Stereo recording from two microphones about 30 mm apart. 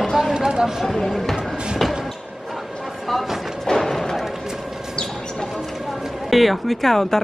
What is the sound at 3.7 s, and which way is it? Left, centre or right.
Music, centre.